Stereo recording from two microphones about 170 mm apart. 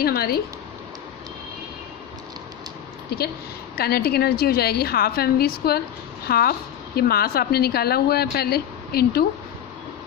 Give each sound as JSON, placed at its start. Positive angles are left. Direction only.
{"t": 0.0, "sound": "a woman's voice", "side_deg": 65}
{"t": 3.7, "sound": "a woman's voice", "side_deg": 65}